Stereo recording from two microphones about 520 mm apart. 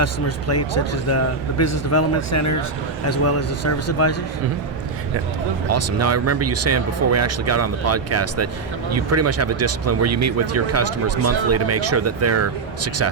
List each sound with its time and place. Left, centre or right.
0.0 s speech: left
5.7 s speech: right